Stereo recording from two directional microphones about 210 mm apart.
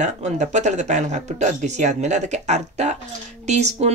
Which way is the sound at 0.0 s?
35° right (ahead or behind).